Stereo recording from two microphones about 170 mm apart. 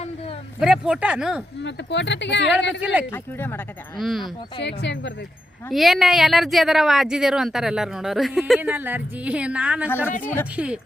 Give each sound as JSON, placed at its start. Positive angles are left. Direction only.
{"t": 0.6, "sound": "speech", "side_deg": -5}
{"t": 1.6, "sound": "speech", "side_deg": 90}
{"t": 2.8, "sound": "speech", "side_deg": -5}
{"t": 3.1, "sound": "speech", "side_deg": 10}
{"t": 3.9, "sound": "speech", "side_deg": 0}
{"t": 4.6, "sound": "speech", "side_deg": 90}
{"t": 5.7, "sound": "speech", "side_deg": 0}